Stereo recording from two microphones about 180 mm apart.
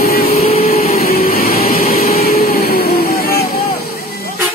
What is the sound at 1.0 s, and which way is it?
Vehicle, 55° left (ahead or behind).